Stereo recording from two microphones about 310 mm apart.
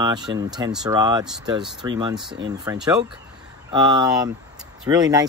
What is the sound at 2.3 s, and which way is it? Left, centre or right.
Speech, right.